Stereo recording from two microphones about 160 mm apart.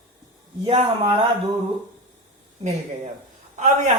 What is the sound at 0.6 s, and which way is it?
Speech, 40° right (ahead or behind).